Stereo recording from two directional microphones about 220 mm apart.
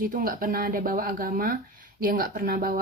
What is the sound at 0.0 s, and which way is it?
Speech, 40° right (ahead or behind).